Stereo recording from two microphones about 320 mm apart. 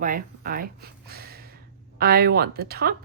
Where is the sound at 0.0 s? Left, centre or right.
Right.